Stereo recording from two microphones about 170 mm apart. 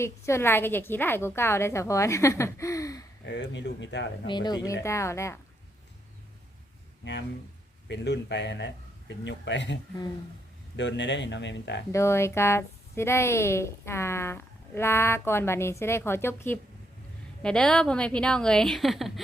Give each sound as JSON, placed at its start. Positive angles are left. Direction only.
{"t": 0.0, "sound": "a woman's voice", "side_deg": 15}
{"t": 3.2, "sound": "a man's voice", "side_deg": 90}
{"t": 4.3, "sound": "a woman's voice", "side_deg": 25}
{"t": 7.0, "sound": "a man's voice", "side_deg": 90}
{"t": 10.8, "sound": "a man's voice", "side_deg": 90}
{"t": 11.9, "sound": "a woman's voice", "side_deg": 15}